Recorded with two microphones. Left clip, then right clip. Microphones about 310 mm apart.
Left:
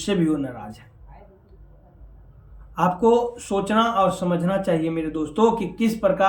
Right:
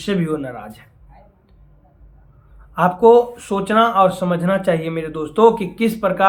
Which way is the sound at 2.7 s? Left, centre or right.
Centre.